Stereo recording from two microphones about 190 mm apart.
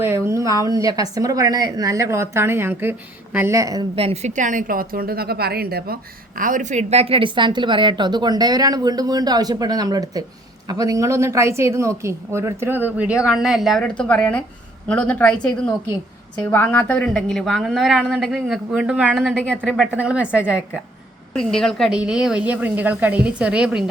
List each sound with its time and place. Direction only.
0.0 s a woman's voice: 15° right (ahead or behind)
3.9 s a woman's voice: 35° right (ahead or behind); by 23.8 s 5° right (ahead or behind)